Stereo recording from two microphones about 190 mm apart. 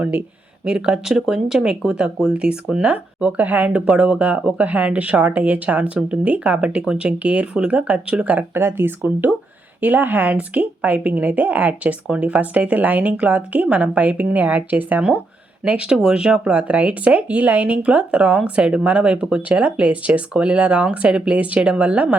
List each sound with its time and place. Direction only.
0.0 s speech: 5° right (ahead or behind)